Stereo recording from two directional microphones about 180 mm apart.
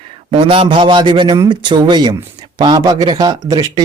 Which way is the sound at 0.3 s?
30° right (ahead or behind).